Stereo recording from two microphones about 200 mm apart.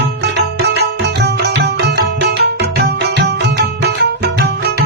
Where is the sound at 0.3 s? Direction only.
55° right (ahead or behind).